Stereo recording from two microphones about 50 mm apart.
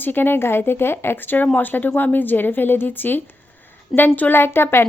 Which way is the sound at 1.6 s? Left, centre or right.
Left.